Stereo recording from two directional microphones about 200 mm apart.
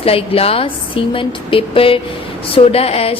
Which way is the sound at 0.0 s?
30° left (ahead or behind).